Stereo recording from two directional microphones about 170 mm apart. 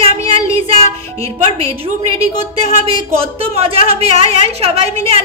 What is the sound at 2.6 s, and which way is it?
A woman's voice, 35° right (ahead or behind).